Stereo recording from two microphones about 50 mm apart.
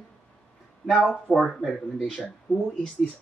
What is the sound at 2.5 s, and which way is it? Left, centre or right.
Speech, left.